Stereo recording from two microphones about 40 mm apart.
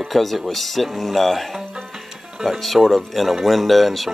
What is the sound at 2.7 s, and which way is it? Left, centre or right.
Speech, centre.